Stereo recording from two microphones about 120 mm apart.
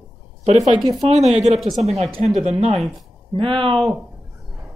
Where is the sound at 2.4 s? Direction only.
65° right (ahead or behind).